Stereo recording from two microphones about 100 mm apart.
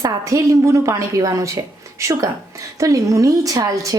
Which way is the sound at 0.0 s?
30° right (ahead or behind).